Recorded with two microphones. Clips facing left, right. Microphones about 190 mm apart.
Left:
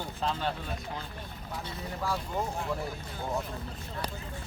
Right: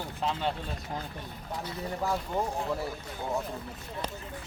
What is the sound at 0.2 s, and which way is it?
Speech, 20° right (ahead or behind).